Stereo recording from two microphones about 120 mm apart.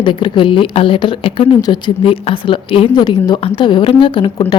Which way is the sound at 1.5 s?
35° left (ahead or behind).